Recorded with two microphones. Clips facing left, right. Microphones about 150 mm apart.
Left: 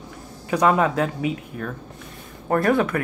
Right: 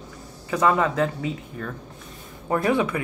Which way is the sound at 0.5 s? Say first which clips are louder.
Left 2 dB; 15° left (ahead or behind).